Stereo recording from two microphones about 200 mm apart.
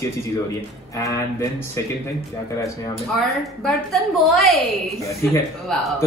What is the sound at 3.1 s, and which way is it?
A woman's voice, centre (ahead or behind).